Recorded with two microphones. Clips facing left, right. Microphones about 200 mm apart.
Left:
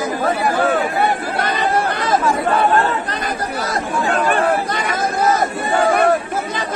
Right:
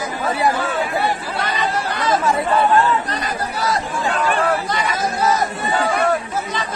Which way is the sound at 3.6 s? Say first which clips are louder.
Even; 50° left (ahead or behind).